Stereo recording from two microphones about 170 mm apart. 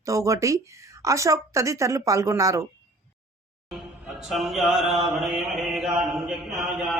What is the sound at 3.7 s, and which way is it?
Music, centre (ahead or behind).